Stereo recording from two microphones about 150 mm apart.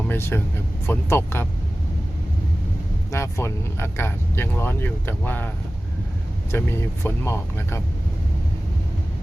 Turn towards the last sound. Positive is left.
turn(degrees=15)  # may be behind; listen again after turning